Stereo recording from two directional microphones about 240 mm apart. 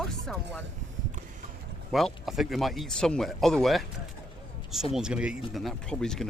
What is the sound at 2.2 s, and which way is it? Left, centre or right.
Speech, centre.